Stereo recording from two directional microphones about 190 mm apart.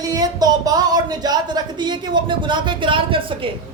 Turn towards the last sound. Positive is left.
turn(degrees=-25)  # may be behind; listen again after turning